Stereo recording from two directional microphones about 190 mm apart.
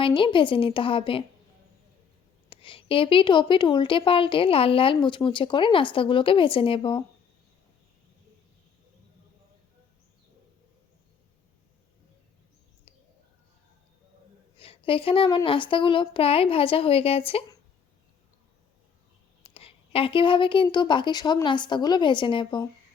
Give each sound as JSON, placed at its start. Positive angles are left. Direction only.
{"t": 0.0, "sound": "speech", "side_deg": 25}
{"t": 2.5, "sound": "speech", "side_deg": 25}
{"t": 14.6, "sound": "speech", "side_deg": 30}
{"t": 19.5, "sound": "speech", "side_deg": 30}